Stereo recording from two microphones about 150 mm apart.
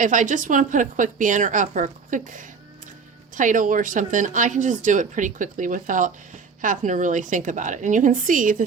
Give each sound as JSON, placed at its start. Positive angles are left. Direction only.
{"t": 0.0, "sound": "a woman's voice", "side_deg": -60}